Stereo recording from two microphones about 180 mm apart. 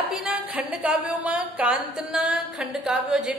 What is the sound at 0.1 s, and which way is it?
A woman's voice, 5° right (ahead or behind).